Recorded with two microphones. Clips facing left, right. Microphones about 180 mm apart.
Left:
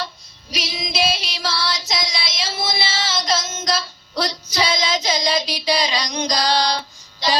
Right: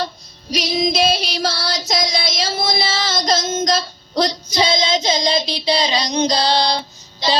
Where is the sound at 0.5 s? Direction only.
40° right (ahead or behind).